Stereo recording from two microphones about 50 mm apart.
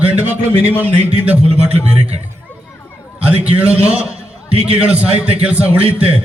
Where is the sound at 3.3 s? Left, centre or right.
Right.